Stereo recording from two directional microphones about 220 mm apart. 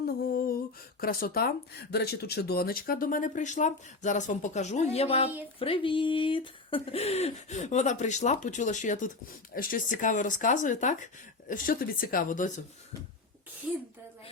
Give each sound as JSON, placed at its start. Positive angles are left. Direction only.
{"t": 1.0, "sound": "speech", "side_deg": 40}